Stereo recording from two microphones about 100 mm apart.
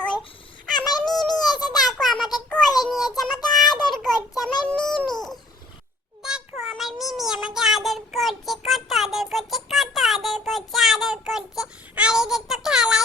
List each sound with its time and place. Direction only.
1.0 s a sound: 5° left (ahead or behind)
2.5 s child singing: 5° left (ahead or behind)
3.7 s child singing: 50° left (ahead or behind)
3.9 s child singing: 5° left (ahead or behind)
4.6 s a sound: 10° left (ahead or behind)
6.2 s child singing: 5° right (ahead or behind)